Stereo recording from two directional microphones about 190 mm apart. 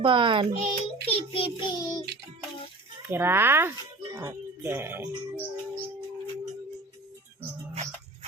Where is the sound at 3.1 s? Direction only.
10° right (ahead or behind).